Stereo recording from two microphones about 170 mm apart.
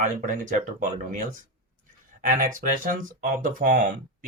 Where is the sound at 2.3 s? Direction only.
50° right (ahead or behind).